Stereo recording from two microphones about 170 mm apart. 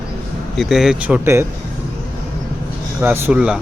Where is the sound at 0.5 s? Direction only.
Centre (ahead or behind).